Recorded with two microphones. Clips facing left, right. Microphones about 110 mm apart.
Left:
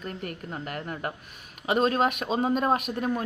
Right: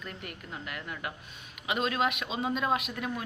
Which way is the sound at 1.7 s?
40° left (ahead or behind).